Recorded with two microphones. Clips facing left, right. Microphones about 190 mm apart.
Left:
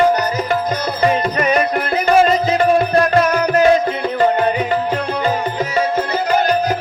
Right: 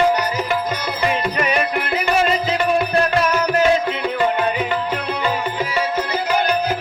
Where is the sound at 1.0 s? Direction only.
35° left (ahead or behind).